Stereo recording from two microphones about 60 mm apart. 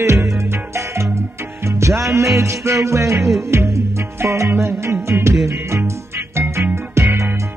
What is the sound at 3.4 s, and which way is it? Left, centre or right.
Music, right.